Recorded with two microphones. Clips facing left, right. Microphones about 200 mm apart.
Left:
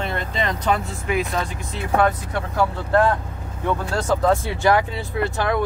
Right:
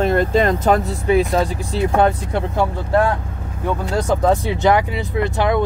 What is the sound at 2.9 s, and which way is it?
Speech, 10° right (ahead or behind).